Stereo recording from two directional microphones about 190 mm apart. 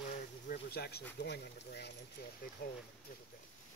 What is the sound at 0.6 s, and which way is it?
Speech, 55° left (ahead or behind).